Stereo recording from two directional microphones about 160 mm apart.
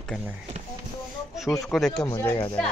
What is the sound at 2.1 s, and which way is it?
Speech, 15° left (ahead or behind).